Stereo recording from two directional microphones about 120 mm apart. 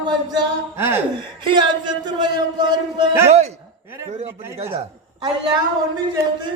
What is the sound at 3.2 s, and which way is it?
Speech, 65° right (ahead or behind).